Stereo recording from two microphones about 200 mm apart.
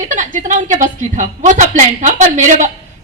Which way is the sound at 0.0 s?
40° right (ahead or behind).